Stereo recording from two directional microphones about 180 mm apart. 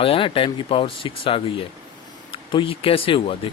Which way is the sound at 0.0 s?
30° left (ahead or behind).